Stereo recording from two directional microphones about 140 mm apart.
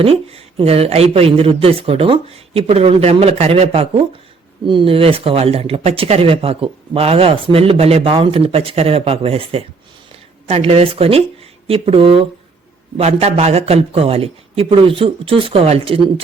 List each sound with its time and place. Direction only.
0.0 s speech: 45° right (ahead or behind)